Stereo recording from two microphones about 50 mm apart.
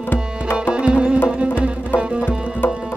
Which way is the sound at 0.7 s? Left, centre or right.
Centre.